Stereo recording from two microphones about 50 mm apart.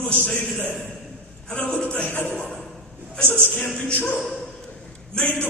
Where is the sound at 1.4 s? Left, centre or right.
Left.